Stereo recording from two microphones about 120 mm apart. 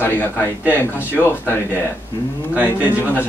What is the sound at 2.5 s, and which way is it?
Speech, 15° right (ahead or behind).